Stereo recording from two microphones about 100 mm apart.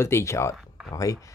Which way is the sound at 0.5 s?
5° right (ahead or behind).